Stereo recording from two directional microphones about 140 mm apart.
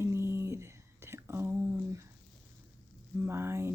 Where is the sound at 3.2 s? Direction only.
15° right (ahead or behind).